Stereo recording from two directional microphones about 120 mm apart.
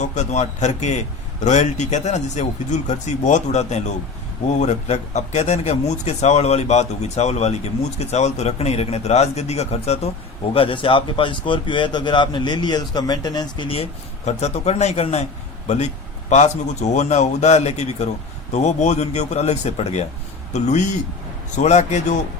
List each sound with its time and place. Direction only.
0.0 s speech: 75° left (ahead or behind)
10.5 s a man's voice: 50° left (ahead or behind)
14.3 s speech: 60° left (ahead or behind); by 22.2 s 80° left